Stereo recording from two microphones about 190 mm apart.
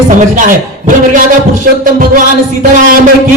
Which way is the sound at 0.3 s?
45° right (ahead or behind).